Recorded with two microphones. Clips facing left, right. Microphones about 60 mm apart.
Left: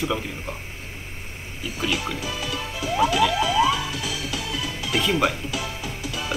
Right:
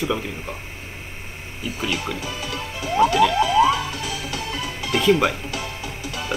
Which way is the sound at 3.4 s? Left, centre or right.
Right.